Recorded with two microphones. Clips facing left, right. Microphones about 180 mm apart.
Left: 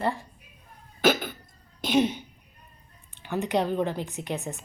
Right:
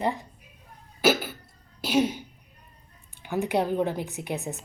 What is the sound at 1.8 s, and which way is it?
A woman's voice, 5° right (ahead or behind).